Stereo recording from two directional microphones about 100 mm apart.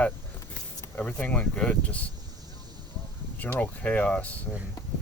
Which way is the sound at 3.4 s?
15° left (ahead or behind).